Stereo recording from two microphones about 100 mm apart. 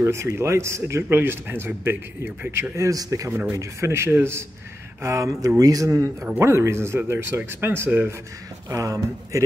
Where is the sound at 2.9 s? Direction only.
35° right (ahead or behind).